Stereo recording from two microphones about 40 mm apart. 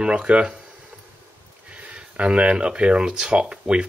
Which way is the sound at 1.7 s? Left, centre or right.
Right.